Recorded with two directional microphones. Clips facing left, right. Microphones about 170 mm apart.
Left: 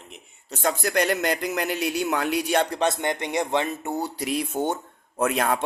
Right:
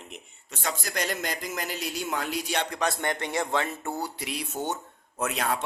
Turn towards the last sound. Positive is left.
turn(degrees=55)  # may be behind; listen again after turning